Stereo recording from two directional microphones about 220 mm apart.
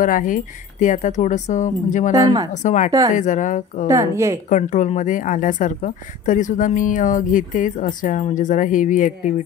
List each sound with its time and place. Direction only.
0.0 s speech: 35° left (ahead or behind)
2.1 s speech: 15° right (ahead or behind)
2.5 s speech: 35° left (ahead or behind)
3.8 s speech: 15° right (ahead or behind)
4.5 s speech: 35° left (ahead or behind)